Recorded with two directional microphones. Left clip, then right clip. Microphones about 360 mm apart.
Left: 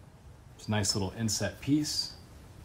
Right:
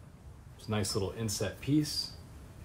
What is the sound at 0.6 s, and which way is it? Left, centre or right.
Speech, left.